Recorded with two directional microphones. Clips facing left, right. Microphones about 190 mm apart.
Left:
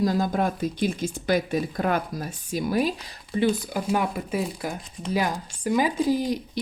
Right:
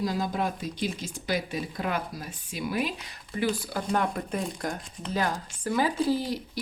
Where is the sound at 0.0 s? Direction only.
50° left (ahead or behind).